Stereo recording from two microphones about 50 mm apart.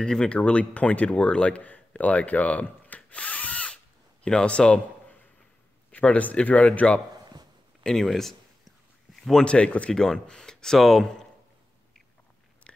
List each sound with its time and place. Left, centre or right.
0.0 s speech: centre
1.6 s drill: left
3.6 s crow: centre
5.9 s speech: left
7.8 s speech: centre
9.4 s speech: left
9.9 s speech: centre
12.7 s biting: left